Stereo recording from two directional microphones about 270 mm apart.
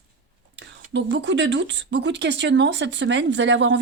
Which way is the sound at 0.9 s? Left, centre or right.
Right.